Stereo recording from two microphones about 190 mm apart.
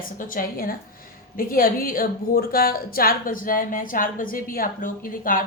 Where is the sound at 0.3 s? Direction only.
50° left (ahead or behind).